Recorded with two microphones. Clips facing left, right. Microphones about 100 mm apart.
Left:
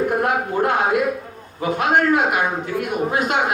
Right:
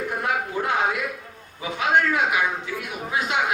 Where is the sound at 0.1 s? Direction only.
50° left (ahead or behind).